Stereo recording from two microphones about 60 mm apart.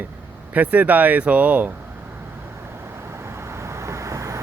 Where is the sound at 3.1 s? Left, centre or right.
Right.